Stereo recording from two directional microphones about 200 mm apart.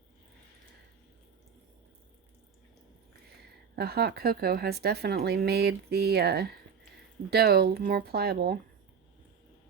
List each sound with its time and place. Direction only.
3.8 s speech: 50° right (ahead or behind)